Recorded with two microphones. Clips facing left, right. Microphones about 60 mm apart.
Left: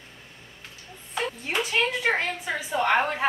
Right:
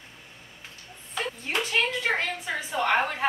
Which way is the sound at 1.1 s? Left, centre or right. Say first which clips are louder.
Left 2 dB; centre.